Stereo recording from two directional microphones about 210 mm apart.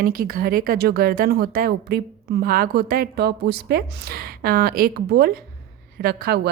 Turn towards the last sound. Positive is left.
turn(degrees=-50)  # may be behind; listen again after turning